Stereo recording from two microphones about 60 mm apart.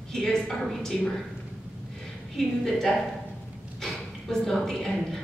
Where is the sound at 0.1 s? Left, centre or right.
Centre.